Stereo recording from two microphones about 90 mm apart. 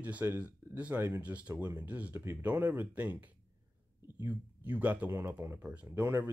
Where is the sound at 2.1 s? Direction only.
25° right (ahead or behind).